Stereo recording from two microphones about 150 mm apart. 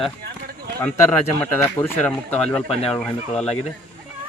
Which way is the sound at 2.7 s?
40° left (ahead or behind).